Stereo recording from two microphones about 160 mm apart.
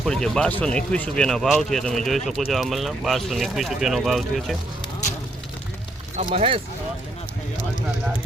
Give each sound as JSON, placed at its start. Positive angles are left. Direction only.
{"t": 0.0, "sound": "speech", "side_deg": 5}
{"t": 6.1, "sound": "speech", "side_deg": -40}